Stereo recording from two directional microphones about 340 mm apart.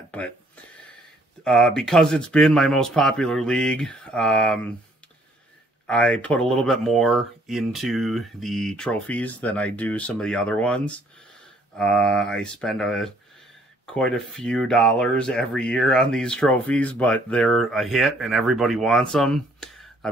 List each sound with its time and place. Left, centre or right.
0.1 s a sound: centre
1.4 s speech: centre
5.9 s speech: centre